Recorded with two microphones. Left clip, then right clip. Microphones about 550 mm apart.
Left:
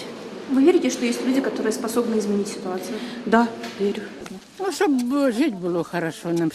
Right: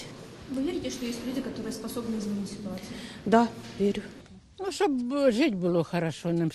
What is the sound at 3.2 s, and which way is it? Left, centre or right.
Speech, right.